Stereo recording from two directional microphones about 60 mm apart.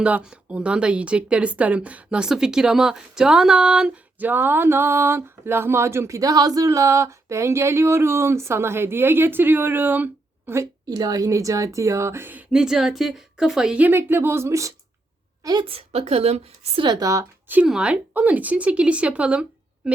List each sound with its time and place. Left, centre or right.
0.0 s speech: centre
4.2 s speech: right
6.1 s speech: right
11.0 s speech: right
12.5 s speech: centre
13.9 s speech: right
15.4 s speech: right
17.0 s speech: right
17.7 s speech: centre
18.1 s speech: right